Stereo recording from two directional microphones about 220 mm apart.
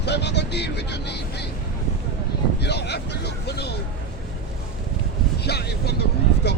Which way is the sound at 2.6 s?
50° left (ahead or behind).